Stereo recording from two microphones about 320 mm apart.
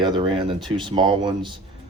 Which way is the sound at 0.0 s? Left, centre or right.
Centre.